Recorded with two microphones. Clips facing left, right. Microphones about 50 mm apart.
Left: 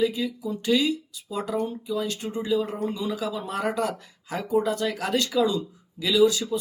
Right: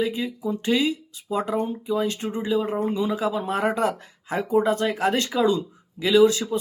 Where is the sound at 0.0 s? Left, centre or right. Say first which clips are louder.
Even; right.